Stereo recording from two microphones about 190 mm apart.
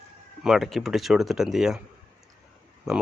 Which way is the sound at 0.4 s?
Centre (ahead or behind).